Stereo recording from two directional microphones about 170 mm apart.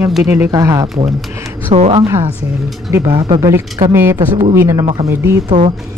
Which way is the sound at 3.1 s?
30° right (ahead or behind).